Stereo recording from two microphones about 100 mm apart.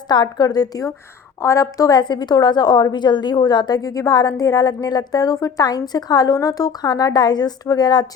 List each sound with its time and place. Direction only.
0.1 s a woman's voice: 45° left (ahead or behind)